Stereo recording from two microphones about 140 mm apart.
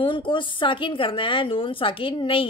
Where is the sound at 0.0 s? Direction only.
35° left (ahead or behind).